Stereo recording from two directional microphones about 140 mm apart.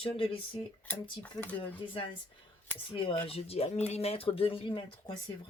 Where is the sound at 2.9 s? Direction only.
40° left (ahead or behind).